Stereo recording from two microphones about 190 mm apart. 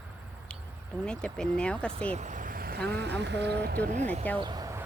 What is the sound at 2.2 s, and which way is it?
Vehicle, 45° right (ahead or behind).